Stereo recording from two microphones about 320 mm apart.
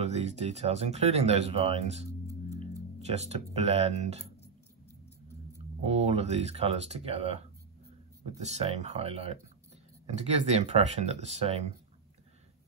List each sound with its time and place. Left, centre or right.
0.0 s speech: right
5.5 s speech: centre